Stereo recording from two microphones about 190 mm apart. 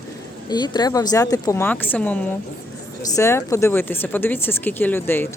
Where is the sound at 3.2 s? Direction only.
15° left (ahead or behind).